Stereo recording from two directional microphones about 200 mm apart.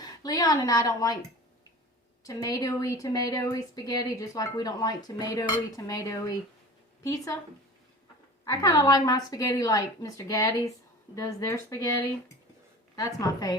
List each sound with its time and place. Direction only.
0.0 s a woman's voice: 20° left (ahead or behind)
2.2 s a woman's voice: 15° left (ahead or behind)
8.4 s a woman's voice: 15° left (ahead or behind)